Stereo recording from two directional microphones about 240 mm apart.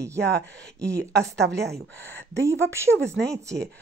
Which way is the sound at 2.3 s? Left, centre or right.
Centre.